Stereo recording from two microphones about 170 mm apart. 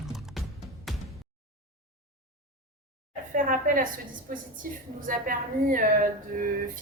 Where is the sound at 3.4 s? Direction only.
55° right (ahead or behind).